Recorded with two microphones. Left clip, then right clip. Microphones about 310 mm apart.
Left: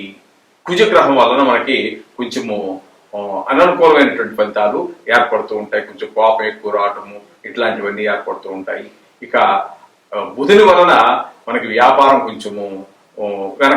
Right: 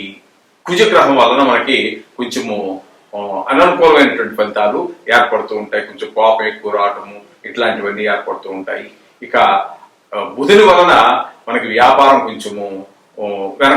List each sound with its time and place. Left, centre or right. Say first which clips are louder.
0.8 s speech: right 1 dB; centre
2.6 s speech: right 1 dB; left
3.5 s speech: right 1 dB; centre
8.2 s speech: right 1 dB; centre
8.6 s a man's voice: right 1 dB; centre
11.9 s speech: right 1 dB; centre
12.1 s speech: right 1 dB; centre
12.5 s speech: right 1 dB; left